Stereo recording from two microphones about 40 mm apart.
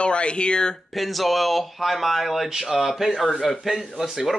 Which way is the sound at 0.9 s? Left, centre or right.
Centre.